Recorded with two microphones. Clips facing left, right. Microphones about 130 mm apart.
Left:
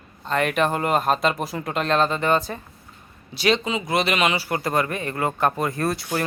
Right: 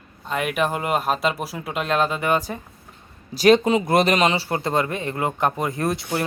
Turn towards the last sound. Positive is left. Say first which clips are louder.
# even
turn(degrees=-20)  # may be behind; listen again after turning